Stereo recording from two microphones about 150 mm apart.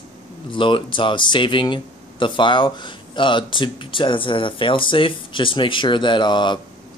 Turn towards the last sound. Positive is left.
turn(degrees=30)  # may be behind; listen again after turning